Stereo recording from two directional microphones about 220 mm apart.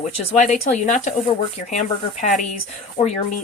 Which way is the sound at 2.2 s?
35° left (ahead or behind).